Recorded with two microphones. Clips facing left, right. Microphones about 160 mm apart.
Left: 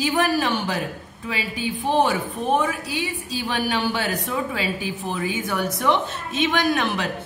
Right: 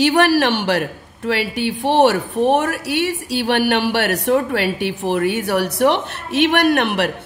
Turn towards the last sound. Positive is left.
turn(degrees=-65)  # may be behind; listen again after turning